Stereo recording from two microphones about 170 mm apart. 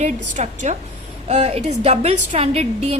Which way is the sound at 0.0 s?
45° right (ahead or behind).